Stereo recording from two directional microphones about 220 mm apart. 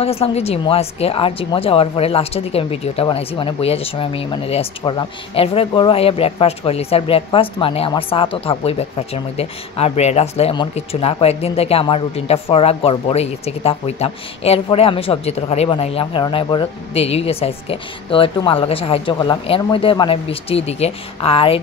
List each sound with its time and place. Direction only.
0.0 s speech: 25° left (ahead or behind)